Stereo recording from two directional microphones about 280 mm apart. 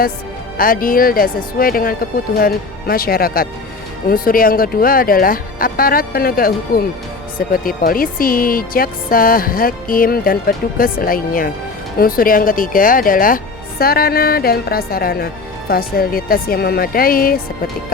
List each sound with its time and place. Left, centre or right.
0.5 s speech: left